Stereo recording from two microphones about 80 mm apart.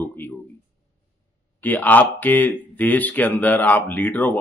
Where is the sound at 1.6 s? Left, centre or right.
Left.